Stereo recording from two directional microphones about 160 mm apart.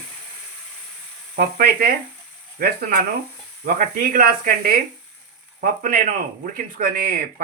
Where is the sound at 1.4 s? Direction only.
65° right (ahead or behind).